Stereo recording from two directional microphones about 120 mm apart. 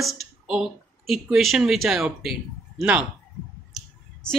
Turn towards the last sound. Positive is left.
turn(degrees=0)  # may be behind; listen again after turning